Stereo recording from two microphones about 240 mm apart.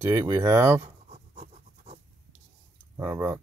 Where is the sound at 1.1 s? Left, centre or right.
Right.